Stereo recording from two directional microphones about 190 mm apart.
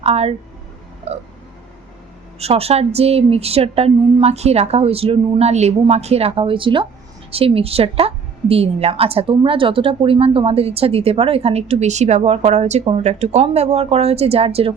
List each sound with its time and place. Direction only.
0.0 s speech: 35° right (ahead or behind)
1.1 s a sound: 35° right (ahead or behind)
2.4 s a woman's voice: 30° right (ahead or behind)